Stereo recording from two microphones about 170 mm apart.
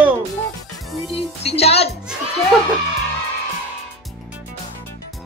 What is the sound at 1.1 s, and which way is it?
Music, 35° left (ahead or behind).